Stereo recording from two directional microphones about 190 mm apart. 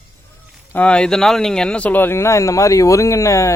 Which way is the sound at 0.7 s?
5° left (ahead or behind).